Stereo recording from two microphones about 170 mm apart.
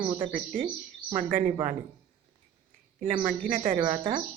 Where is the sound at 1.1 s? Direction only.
50° right (ahead or behind).